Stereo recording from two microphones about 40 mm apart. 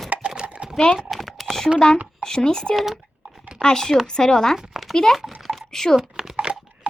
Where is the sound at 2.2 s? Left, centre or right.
Centre.